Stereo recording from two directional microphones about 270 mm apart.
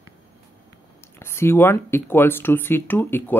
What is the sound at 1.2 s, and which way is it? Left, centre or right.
Speech, centre.